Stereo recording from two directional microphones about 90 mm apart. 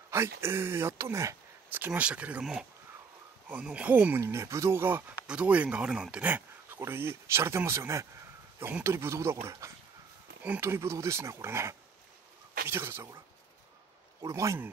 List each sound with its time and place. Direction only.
0.1 s speech: 30° right (ahead or behind)
1.7 s speech: 20° right (ahead or behind)
3.4 s speech: 15° right (ahead or behind)
4.2 s speech: 30° right (ahead or behind)
5.2 s speech: 15° right (ahead or behind)
14.2 s speech: 35° right (ahead or behind)